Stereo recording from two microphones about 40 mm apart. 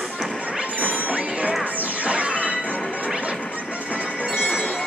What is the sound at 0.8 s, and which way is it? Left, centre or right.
Music, right.